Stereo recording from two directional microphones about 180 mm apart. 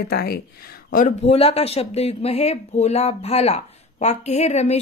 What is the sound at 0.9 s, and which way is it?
A woman's voice, 35° left (ahead or behind).